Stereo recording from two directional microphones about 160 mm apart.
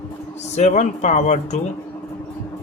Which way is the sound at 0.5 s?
45° left (ahead or behind).